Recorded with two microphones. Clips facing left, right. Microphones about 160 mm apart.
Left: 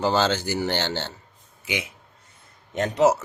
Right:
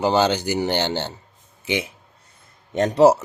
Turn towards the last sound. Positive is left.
turn(degrees=-35)  # may be behind; listen again after turning